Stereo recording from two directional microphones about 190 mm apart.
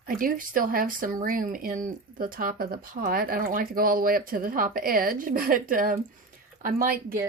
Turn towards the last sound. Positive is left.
turn(degrees=-50)  # may be behind; listen again after turning